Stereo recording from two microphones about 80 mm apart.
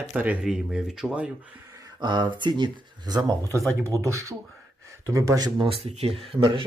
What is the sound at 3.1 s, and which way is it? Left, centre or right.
Speech, right.